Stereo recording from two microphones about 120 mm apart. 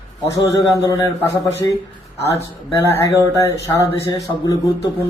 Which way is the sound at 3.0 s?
25° left (ahead or behind).